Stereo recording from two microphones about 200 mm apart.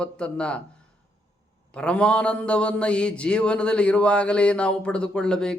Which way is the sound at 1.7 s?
5° left (ahead or behind).